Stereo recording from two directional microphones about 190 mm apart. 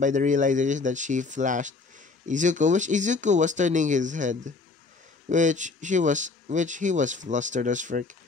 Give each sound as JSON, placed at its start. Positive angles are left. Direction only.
{"t": 0.0, "sound": "speech", "side_deg": -40}